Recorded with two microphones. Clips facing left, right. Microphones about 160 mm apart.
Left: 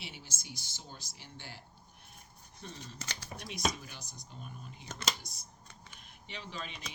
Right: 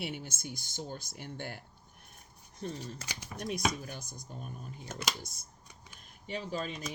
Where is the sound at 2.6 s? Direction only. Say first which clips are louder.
Right 6 dB; 45° right (ahead or behind).